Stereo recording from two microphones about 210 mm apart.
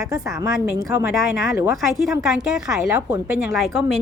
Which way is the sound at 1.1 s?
Centre (ahead or behind).